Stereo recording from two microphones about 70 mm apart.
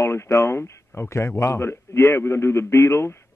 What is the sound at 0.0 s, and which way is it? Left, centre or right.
A man's voice, left.